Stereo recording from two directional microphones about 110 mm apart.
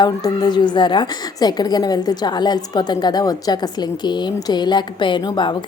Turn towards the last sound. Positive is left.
turn(degrees=40)  # may be behind; listen again after turning